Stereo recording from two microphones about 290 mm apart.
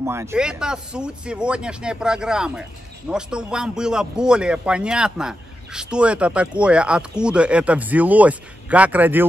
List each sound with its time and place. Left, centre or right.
0.0 s a man's voice: centre